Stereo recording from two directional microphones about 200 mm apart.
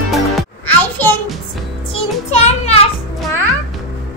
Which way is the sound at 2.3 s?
35° left (ahead or behind).